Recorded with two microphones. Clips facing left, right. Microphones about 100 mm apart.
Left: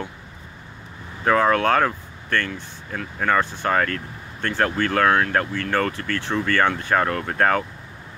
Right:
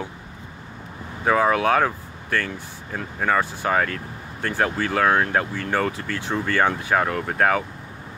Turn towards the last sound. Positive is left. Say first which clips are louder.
# even
turn(degrees=-5)  # may be behind; listen again after turning